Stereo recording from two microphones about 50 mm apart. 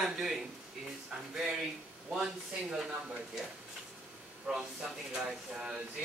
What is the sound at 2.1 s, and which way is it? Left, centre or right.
Speech, centre.